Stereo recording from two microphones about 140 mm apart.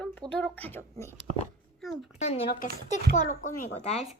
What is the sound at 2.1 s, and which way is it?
Speech, 50° left (ahead or behind).